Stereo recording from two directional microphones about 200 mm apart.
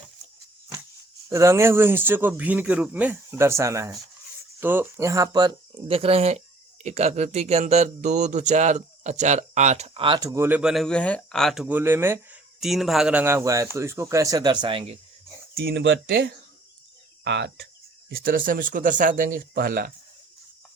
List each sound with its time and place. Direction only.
1.3 s speech: 15° right (ahead or behind)
15.5 s speech: 55° right (ahead or behind)
18.2 s speech: 45° right (ahead or behind)